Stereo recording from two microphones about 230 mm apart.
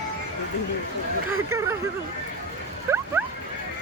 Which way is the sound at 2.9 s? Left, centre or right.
Centre.